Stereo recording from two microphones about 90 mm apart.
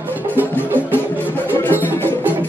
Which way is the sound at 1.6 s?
25° left (ahead or behind).